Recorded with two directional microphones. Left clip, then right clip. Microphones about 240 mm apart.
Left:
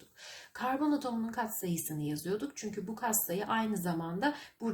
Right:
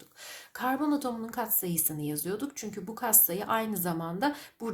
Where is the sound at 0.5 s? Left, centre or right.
Right.